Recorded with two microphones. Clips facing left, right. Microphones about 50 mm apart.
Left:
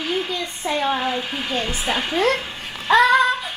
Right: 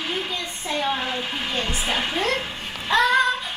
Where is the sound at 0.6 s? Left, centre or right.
Centre.